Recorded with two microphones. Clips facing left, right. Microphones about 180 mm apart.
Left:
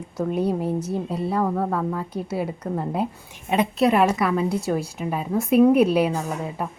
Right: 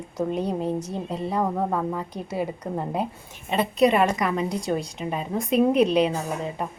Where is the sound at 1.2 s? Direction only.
15° right (ahead or behind).